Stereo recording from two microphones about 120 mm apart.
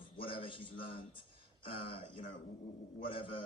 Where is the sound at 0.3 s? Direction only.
45° left (ahead or behind).